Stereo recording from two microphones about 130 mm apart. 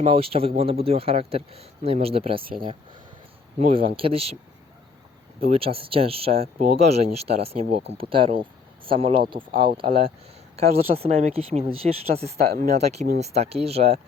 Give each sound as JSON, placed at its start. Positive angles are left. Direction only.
{"t": 0.0, "sound": "speech", "side_deg": -45}
{"t": 3.6, "sound": "speech", "side_deg": -45}
{"t": 5.5, "sound": "speech", "side_deg": -45}